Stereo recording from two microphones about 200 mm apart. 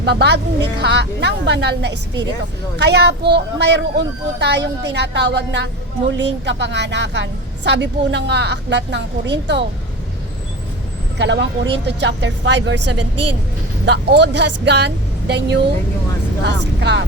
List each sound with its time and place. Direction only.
0.0 s a woman's voice: 60° right (ahead or behind)
11.2 s a woman's voice: 60° right (ahead or behind)